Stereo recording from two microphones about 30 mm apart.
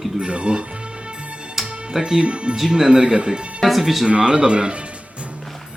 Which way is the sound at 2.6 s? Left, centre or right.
Right.